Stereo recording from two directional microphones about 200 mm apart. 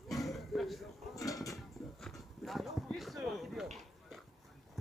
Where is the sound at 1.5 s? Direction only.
Centre (ahead or behind).